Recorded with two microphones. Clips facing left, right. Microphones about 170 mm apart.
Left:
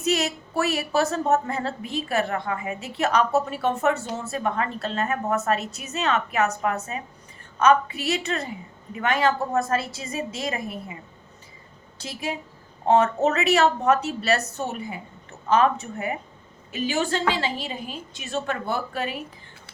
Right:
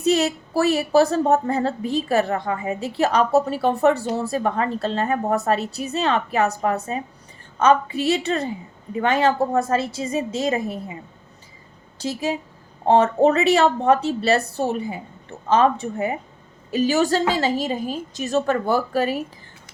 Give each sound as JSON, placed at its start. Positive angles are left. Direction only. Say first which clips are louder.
{"t": 0.0, "sound": "a woman's voice", "louder": "right 5 dB", "side_deg": -35}
{"t": 11.9, "sound": "a woman's voice", "louder": "right 6 dB", "side_deg": -30}
{"t": 16.7, "sound": "a woman's voice", "louder": "right 6 dB", "side_deg": -40}